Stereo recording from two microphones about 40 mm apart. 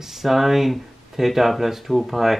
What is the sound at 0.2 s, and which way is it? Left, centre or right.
Speech, centre.